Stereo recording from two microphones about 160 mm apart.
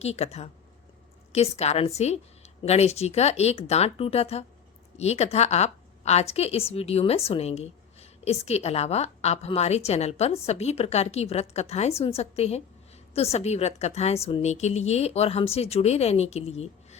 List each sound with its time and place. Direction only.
0.0 s a woman's voice: 40° left (ahead or behind)